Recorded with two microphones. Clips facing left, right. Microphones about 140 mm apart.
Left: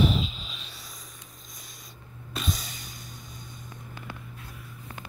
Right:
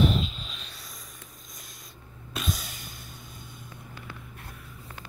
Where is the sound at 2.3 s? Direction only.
Centre (ahead or behind).